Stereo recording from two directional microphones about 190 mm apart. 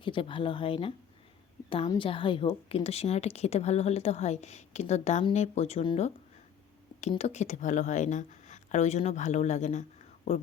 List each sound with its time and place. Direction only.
0.0 s a woman's voice: 25° left (ahead or behind)
7.1 s speech: 35° left (ahead or behind)